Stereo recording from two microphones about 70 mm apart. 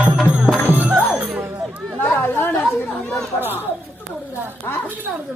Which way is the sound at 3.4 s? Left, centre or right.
Right.